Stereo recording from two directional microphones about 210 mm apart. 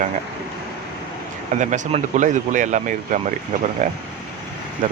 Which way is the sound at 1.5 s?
35° right (ahead or behind).